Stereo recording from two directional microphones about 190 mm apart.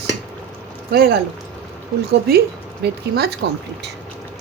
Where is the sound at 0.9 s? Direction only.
55° right (ahead or behind).